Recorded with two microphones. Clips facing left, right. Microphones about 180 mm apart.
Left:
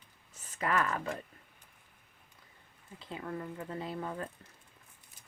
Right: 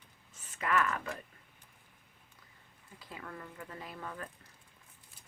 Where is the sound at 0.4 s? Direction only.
35° left (ahead or behind).